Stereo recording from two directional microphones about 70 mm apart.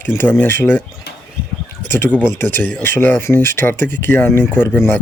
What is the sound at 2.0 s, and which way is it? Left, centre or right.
Speech, left.